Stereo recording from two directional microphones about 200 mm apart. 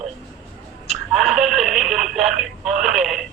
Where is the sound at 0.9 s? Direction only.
Centre (ahead or behind).